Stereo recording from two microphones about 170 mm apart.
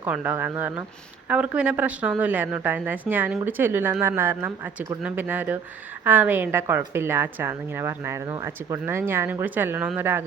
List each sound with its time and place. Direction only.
0.0 s a woman's voice: 10° right (ahead or behind)